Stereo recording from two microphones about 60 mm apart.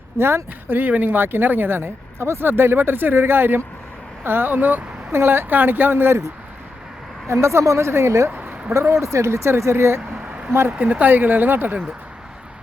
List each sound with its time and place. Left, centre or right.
0.2 s speech: right
7.3 s speech: right
8.3 s a sound: right
8.9 s speech: right
10.2 s a sound: centre
10.7 s speech: right